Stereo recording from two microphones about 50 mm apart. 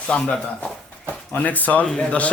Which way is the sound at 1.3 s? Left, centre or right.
Left.